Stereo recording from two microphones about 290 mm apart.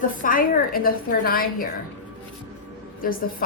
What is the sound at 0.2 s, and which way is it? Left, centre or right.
A woman's voice, left.